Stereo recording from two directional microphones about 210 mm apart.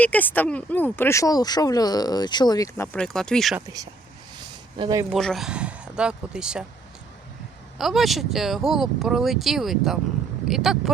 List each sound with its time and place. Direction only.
0.0 s speech: 10° left (ahead or behind)
4.8 s speech: 15° right (ahead or behind)
5.1 s speech: centre (ahead or behind)
7.8 s speech: centre (ahead or behind)